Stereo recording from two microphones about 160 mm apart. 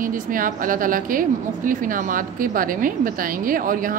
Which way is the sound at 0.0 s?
60° right (ahead or behind).